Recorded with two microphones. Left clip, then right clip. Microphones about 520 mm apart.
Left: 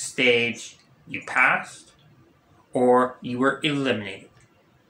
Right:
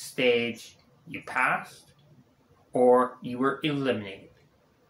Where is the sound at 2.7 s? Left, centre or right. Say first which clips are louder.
Left 2 dB; right.